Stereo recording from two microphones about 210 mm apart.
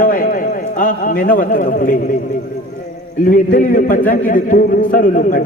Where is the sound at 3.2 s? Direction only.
40° left (ahead or behind).